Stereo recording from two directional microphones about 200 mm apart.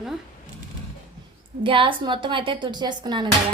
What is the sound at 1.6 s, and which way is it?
A woman's voice, 25° right (ahead or behind).